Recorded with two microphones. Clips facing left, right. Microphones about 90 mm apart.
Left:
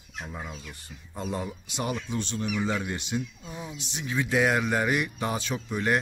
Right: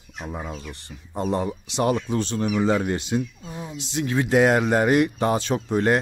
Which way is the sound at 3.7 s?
90° right.